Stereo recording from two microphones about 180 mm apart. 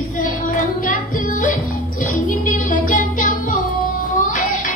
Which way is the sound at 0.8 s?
45° left (ahead or behind).